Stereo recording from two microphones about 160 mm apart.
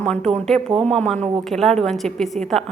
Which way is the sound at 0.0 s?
5° left (ahead or behind).